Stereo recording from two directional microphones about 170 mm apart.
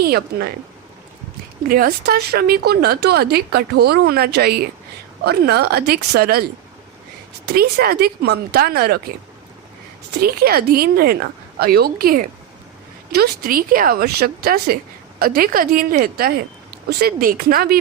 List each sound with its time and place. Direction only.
0.0 s a woman's voice: 65° right (ahead or behind)
1.6 s a woman's voice: 60° right (ahead or behind)
10.1 s a woman's voice: 65° right (ahead or behind)